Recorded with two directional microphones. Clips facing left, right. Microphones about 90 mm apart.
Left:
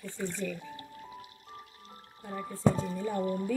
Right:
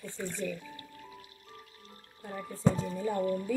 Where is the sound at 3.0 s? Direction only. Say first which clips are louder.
Right 2 dB; 20° left (ahead or behind).